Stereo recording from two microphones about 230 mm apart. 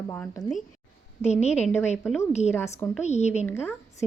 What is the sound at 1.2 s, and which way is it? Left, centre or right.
Speech, left.